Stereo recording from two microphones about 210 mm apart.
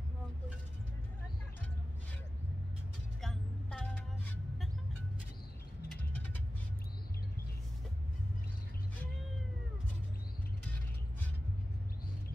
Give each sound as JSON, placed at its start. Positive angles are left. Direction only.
{"t": 3.2, "sound": "vehicle", "side_deg": 0}